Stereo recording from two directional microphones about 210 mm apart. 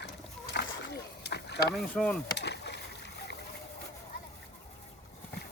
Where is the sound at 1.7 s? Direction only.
5° left (ahead or behind).